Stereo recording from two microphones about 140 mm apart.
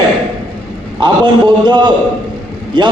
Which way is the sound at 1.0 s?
35° right (ahead or behind).